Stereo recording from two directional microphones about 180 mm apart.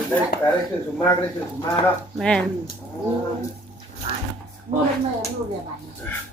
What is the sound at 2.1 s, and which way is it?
Speech, 5° left (ahead or behind).